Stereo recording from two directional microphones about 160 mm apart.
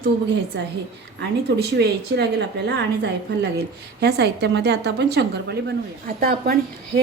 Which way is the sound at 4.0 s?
90° right.